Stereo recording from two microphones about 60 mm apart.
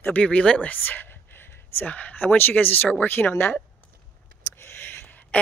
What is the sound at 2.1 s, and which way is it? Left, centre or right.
Speech, left.